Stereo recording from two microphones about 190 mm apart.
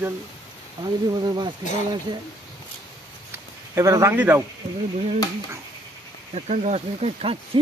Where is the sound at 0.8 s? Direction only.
20° right (ahead or behind).